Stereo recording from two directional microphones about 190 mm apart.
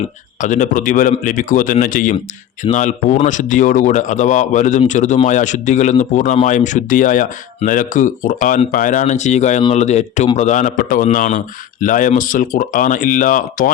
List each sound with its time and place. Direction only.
0.3 s a man's voice: 40° left (ahead or behind)